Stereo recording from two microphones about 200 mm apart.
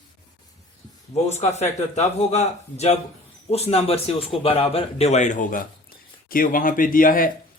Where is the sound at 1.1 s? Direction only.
35° left (ahead or behind).